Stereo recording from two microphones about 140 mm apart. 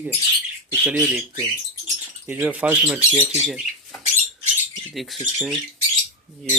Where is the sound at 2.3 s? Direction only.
10° right (ahead or behind).